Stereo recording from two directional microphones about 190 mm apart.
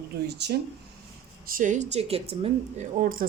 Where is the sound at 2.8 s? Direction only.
45° right (ahead or behind).